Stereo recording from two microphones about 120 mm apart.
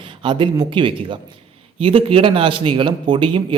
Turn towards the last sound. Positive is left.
turn(degrees=-45)  # may be behind; listen again after turning